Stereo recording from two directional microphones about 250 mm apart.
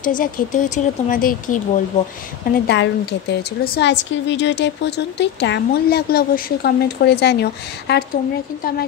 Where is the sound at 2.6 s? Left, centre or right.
Left.